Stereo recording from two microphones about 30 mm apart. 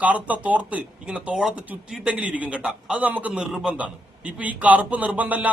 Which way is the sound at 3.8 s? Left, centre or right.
Right.